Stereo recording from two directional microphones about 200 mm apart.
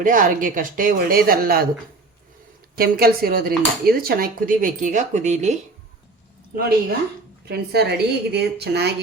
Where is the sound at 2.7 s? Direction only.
50° right (ahead or behind).